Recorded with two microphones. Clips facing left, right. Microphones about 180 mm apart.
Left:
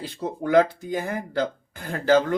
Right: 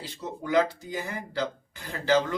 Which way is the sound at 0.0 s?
55° left (ahead or behind).